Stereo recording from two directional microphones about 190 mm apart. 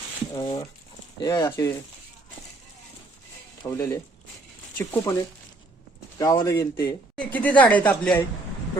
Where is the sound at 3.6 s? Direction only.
15° left (ahead or behind).